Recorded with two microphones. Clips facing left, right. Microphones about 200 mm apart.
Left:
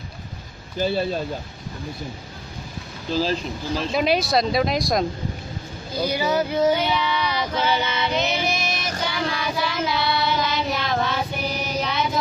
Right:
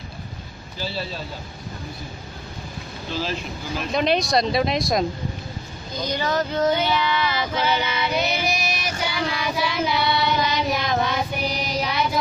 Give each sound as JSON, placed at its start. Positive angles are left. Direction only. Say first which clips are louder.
{"t": 0.7, "sound": "speech", "louder": "left 8 dB", "side_deg": 55}
{"t": 3.1, "sound": "speech", "louder": "left 5 dB", "side_deg": 40}
{"t": 3.9, "sound": "speech", "louder": "right 1 dB", "side_deg": 5}
{"t": 5.9, "sound": "a sound", "louder": "left 2 dB", "side_deg": 10}
{"t": 7.2, "sound": "female singing", "louder": "even", "side_deg": -5}
{"t": 9.0, "sound": "child singing", "louder": "even", "side_deg": -10}
{"t": 10.0, "sound": "child singing", "louder": "right 1 dB", "side_deg": 0}
{"t": 10.4, "sound": "child singing", "louder": "right 1 dB", "side_deg": -15}
{"t": 11.8, "sound": "music", "louder": "right 1 dB", "side_deg": -10}